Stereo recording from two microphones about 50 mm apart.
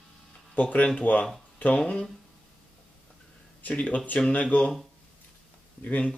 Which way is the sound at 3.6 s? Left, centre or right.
Left.